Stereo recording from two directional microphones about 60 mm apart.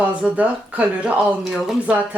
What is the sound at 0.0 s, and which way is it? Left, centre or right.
Speech, right.